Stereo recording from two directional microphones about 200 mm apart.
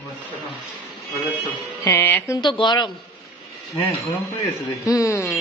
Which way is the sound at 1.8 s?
10° left (ahead or behind).